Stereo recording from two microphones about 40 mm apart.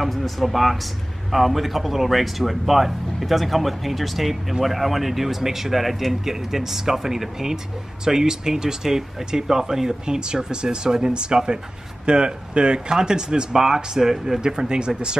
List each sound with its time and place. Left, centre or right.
0.0 s speech: centre; by 15.1 s right